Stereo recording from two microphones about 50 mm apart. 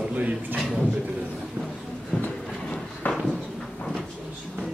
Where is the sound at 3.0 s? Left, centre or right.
Left.